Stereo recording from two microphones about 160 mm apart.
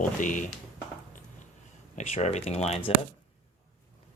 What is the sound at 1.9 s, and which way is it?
Speech, 45° left (ahead or behind).